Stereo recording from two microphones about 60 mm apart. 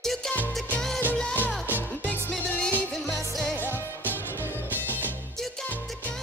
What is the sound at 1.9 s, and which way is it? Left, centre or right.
Music, left.